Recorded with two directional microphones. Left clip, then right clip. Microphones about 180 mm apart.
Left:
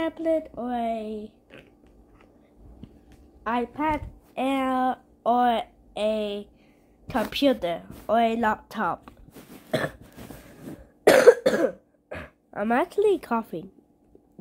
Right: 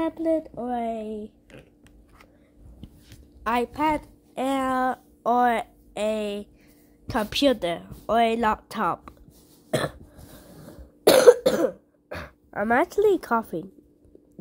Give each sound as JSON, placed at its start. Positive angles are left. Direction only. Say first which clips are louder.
{"t": 0.0, "sound": "speech", "louder": "even", "side_deg": -30}
{"t": 3.4, "sound": "a woman's voice", "louder": "right 2 dB", "side_deg": -35}
{"t": 9.7, "sound": "throat clearing", "louder": "right 1 dB", "side_deg": -20}
{"t": 11.1, "sound": "cough", "louder": "right 1 dB", "side_deg": -15}